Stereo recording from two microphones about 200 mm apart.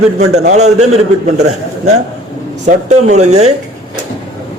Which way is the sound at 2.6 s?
35° right (ahead or behind).